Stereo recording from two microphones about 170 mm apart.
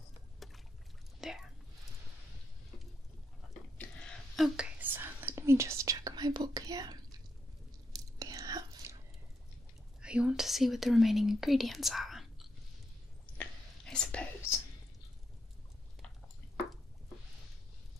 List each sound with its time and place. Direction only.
0.4 s boat: centre (ahead or behind)
1.2 s speech: 5° right (ahead or behind)
3.7 s a sound: 5° left (ahead or behind)
4.6 s whispering: 10° right (ahead or behind)
10.0 s speech: 5° right (ahead or behind)
13.4 s whispering: 5° left (ahead or behind)